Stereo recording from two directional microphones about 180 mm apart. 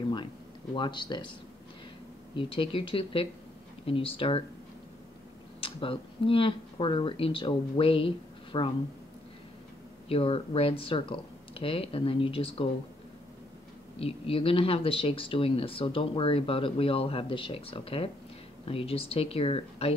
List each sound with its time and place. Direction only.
0.7 s speech: 25° left (ahead or behind)
2.3 s speech: 30° left (ahead or behind)
5.6 s speech: 30° left (ahead or behind)
10.0 s speech: 30° left (ahead or behind)
13.9 s speech: 30° left (ahead or behind)